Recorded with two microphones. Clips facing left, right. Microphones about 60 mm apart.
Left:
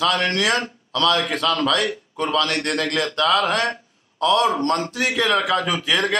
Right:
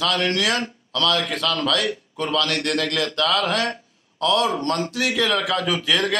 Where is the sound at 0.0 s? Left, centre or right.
Left.